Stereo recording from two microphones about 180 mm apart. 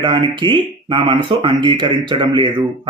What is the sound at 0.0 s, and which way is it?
Speech, 25° right (ahead or behind).